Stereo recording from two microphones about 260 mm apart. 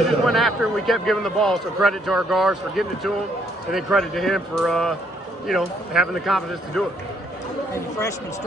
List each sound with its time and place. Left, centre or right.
0.2 s a man's voice: centre